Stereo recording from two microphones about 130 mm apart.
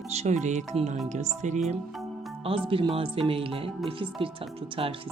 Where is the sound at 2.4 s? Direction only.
45° right (ahead or behind).